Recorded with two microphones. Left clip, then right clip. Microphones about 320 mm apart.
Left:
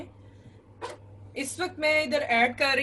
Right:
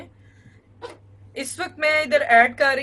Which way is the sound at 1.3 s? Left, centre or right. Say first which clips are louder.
Right 4 dB; right.